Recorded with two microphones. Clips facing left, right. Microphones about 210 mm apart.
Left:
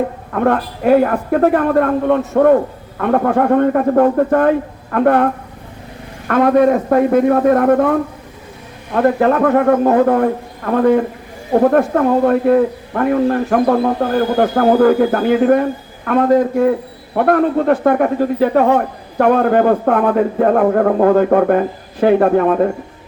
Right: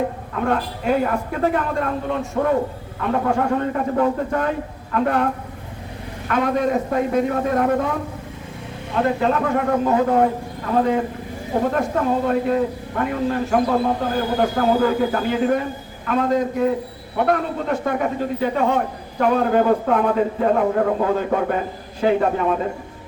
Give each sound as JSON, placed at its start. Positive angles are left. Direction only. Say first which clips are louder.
{"t": 0.3, "sound": "a man's voice", "louder": "left 7 dB", "side_deg": 55}